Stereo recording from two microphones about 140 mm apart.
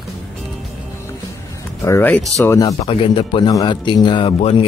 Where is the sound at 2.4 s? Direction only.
25° left (ahead or behind).